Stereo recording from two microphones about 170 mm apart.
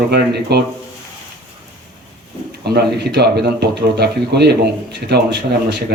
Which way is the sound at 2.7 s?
75° right (ahead or behind).